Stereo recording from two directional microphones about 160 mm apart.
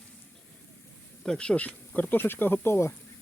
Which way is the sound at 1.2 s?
5° left (ahead or behind).